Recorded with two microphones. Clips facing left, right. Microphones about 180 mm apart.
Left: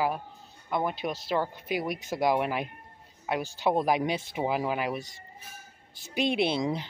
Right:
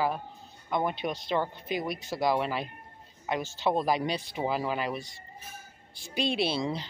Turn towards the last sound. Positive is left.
turn(degrees=15)  # may be behind; listen again after turning